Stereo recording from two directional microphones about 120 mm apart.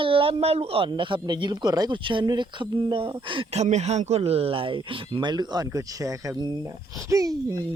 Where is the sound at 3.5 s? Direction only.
65° right (ahead or behind); by 7.3 s 25° right (ahead or behind).